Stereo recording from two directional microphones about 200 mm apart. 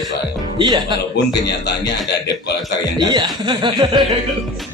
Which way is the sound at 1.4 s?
55° left (ahead or behind).